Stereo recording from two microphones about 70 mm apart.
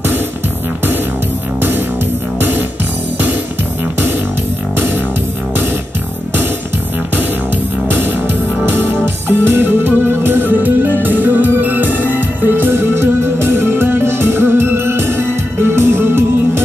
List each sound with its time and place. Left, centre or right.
7.9 s music: right